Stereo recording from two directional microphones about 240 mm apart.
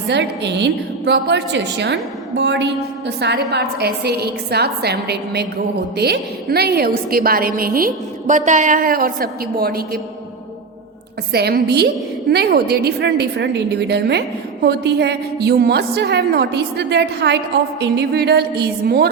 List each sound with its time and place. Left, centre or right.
0.1 s a woman's voice: right
11.3 s a woman's voice: right